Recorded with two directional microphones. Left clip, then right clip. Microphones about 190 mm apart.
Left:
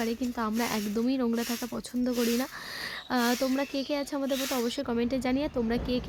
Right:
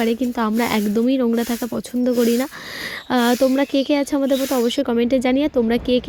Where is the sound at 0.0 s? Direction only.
35° right (ahead or behind).